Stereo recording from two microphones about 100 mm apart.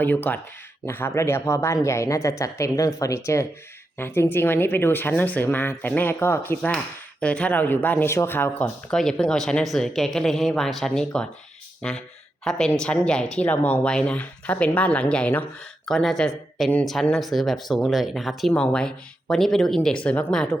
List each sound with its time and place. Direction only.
0.0 s speech: 20° left (ahead or behind)
7.2 s speech: 10° left (ahead or behind)
8.9 s speech: 5° left (ahead or behind)